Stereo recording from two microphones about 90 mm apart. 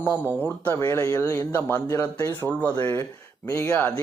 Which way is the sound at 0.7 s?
30° left (ahead or behind).